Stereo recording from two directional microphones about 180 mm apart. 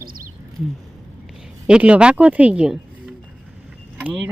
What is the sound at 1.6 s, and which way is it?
Speech, 5° right (ahead or behind).